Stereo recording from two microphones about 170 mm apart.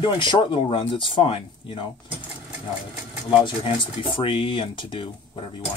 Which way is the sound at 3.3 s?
30° left (ahead or behind).